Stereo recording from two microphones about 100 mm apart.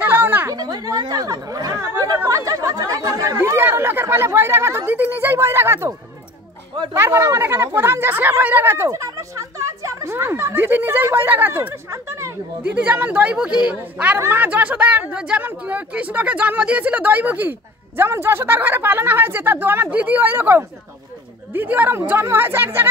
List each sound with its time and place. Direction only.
0.0 s a sound: 20° right (ahead or behind)
0.5 s chatter: 40° right (ahead or behind)
3.4 s speech: 25° right (ahead or behind)
7.0 s speech: 25° right (ahead or behind)
8.8 s speech: 35° right (ahead or behind)
12.7 s speech: 15° right (ahead or behind)
14.1 s speech: 20° right (ahead or behind)